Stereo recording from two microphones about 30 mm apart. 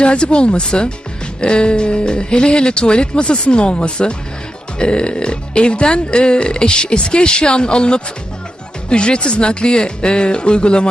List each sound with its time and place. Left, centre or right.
0.0 s speech: left